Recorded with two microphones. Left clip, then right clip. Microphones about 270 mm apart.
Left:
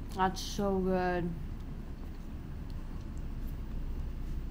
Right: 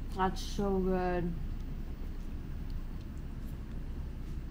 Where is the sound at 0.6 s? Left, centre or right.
Left.